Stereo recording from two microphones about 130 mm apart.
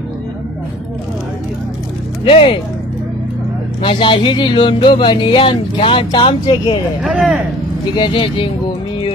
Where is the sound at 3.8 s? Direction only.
40° left (ahead or behind).